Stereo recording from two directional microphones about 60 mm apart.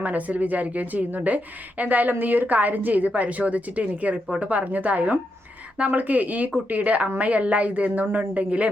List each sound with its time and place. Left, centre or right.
0.0 s a woman's voice: right